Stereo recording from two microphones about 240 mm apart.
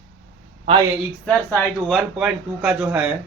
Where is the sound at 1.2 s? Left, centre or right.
Centre.